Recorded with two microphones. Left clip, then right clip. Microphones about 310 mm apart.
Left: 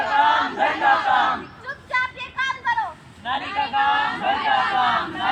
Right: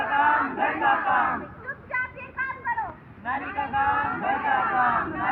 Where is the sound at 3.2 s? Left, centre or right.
Left.